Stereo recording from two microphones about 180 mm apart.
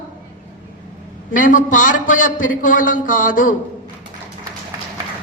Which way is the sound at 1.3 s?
45° left (ahead or behind).